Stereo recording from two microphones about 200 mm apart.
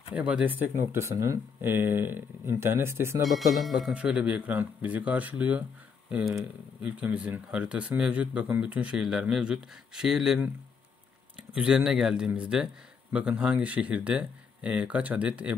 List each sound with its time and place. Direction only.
0.1 s speech: 5° right (ahead or behind)
3.3 s speech: centre (ahead or behind)